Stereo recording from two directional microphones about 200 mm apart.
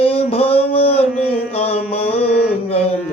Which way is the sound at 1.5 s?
30° left (ahead or behind).